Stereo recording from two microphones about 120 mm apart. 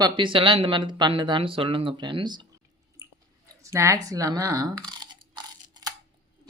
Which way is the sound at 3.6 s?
25° right (ahead or behind).